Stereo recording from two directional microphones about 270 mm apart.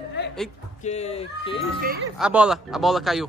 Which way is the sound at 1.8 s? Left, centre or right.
Right.